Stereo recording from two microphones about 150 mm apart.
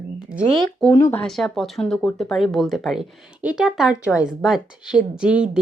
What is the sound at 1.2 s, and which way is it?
Speech, centre (ahead or behind).